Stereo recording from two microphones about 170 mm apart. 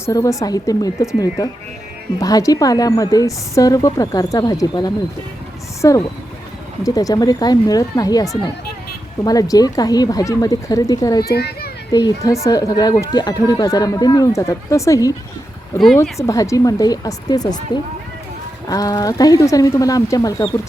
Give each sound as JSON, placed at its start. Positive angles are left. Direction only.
{"t": 0.0, "sound": "a woman's voice", "side_deg": 20}
{"t": 2.1, "sound": "a woman's voice", "side_deg": 20}
{"t": 11.3, "sound": "a child's voice", "side_deg": 70}
{"t": 11.9, "sound": "a woman's voice", "side_deg": 20}
{"t": 18.7, "sound": "a woman's voice", "side_deg": 20}